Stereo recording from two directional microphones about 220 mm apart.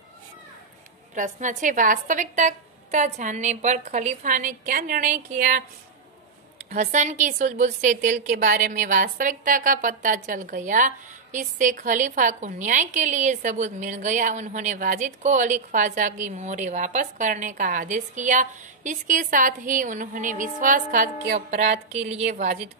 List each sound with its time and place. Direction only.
1.1 s a woman's voice: 35° right (ahead or behind)
6.6 s a woman's voice: 30° right (ahead or behind)